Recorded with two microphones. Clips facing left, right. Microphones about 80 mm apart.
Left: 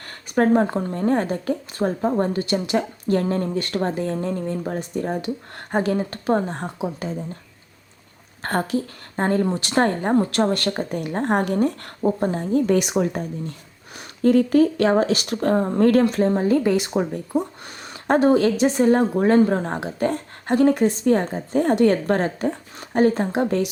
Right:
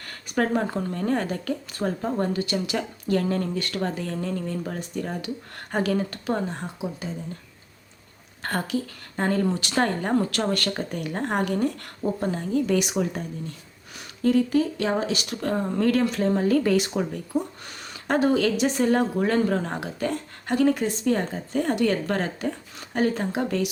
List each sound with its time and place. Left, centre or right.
0.0 s speech: left
8.4 s a woman's voice: left
15.4 s speech: left
16.1 s speech: left